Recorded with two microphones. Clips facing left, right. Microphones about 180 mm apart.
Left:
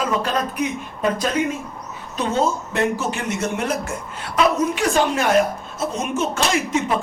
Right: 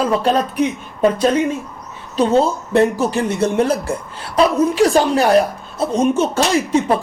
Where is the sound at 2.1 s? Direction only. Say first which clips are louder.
Right 6 dB; 35° right (ahead or behind).